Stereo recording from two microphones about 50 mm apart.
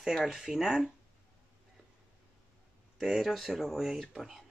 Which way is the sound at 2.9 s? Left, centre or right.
Centre.